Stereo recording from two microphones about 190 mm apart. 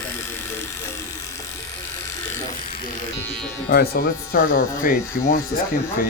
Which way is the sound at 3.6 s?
55° left (ahead or behind).